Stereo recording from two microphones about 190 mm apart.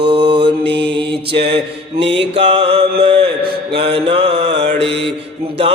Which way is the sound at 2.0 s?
70° right (ahead or behind).